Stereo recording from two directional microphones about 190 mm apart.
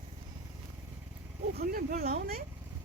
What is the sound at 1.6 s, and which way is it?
Speech, 50° right (ahead or behind).